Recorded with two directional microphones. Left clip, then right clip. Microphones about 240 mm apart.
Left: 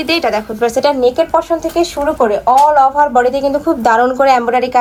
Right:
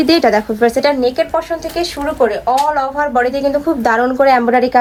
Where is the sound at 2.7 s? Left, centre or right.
Centre.